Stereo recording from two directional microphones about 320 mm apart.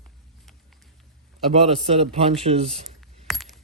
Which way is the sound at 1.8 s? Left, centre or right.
Centre.